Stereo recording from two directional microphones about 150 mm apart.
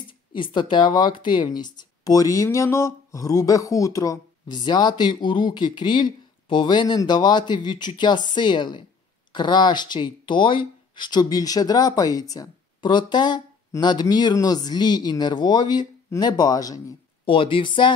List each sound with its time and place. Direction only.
0.3 s speech: 30° left (ahead or behind)
17.2 s speech: 35° left (ahead or behind)